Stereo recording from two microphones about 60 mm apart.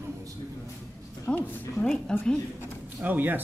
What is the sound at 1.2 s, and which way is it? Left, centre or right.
A woman's voice, centre.